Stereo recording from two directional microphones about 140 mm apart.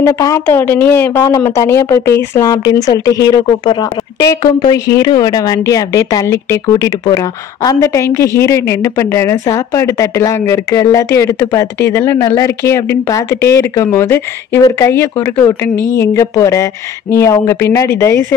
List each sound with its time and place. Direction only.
0.0 s a woman's voice: 20° left (ahead or behind)